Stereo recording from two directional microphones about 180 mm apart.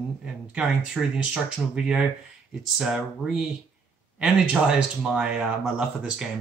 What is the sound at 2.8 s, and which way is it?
Speech, 5° right (ahead or behind).